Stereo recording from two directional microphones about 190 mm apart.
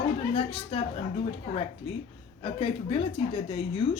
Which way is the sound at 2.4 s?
30° left (ahead or behind).